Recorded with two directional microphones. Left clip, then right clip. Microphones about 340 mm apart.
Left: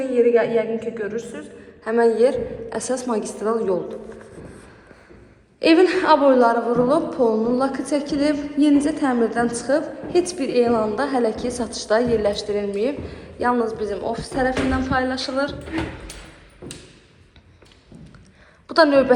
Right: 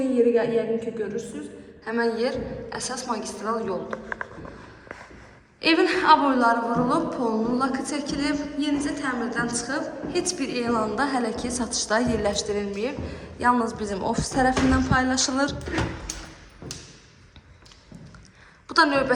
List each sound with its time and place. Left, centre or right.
0.0 s a man's voice: centre
5.5 s a man's voice: centre
18.7 s a man's voice: centre